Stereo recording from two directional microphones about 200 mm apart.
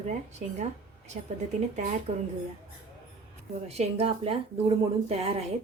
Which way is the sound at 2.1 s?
30° right (ahead or behind).